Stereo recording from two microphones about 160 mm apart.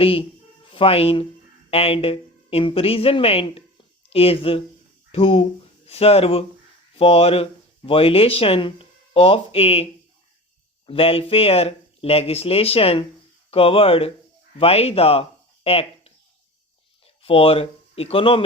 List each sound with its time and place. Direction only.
0.0 s speech: 35° left (ahead or behind)
17.2 s speech: 35° left (ahead or behind)